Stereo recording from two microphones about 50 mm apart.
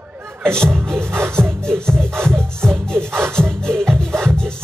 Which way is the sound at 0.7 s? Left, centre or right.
Right.